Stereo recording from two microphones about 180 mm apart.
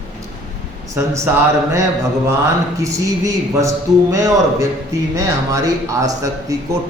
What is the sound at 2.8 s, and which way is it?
A man's voice, 15° right (ahead or behind).